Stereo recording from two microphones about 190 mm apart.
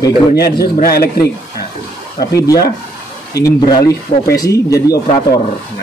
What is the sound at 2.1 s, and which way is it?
Speech, 20° left (ahead or behind).